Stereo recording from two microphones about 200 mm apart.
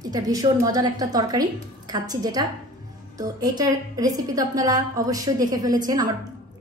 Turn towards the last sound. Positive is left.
turn(degrees=-20)  # may be behind; listen again after turning